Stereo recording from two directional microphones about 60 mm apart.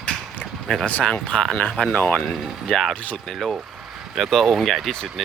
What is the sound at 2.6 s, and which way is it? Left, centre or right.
Speech, centre.